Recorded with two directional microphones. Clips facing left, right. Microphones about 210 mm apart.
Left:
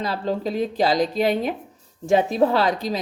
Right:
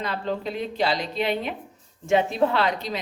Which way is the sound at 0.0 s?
35° left (ahead or behind).